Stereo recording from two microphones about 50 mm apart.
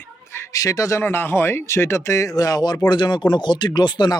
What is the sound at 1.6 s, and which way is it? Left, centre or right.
Speech, left.